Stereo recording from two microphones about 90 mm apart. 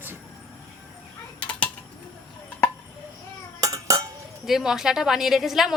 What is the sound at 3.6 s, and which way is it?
Cutlery, 40° right (ahead or behind).